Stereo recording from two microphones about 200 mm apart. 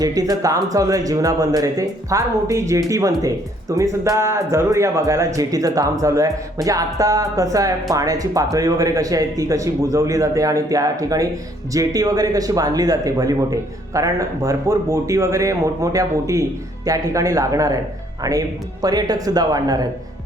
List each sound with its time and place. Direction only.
0.0 s speech: 20° right (ahead or behind)